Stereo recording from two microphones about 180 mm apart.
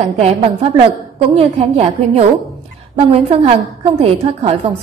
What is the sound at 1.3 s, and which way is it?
A woman's voice, 35° right (ahead or behind).